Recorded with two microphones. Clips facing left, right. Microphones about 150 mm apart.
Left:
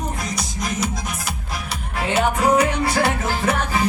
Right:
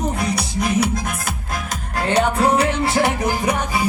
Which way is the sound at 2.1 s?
25° right (ahead or behind).